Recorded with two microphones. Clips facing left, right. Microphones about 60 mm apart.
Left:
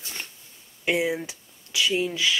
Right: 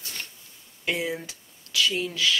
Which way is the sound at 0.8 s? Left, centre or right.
Centre.